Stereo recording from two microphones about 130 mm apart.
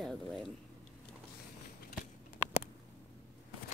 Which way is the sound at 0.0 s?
Centre (ahead or behind).